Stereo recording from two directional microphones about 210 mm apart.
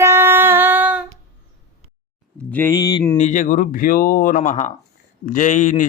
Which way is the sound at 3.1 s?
35° left (ahead or behind).